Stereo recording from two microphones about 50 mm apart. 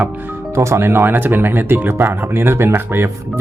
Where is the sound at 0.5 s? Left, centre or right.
Right.